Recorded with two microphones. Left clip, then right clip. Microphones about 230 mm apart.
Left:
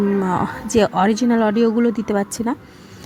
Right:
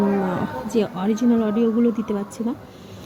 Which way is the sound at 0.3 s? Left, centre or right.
Left.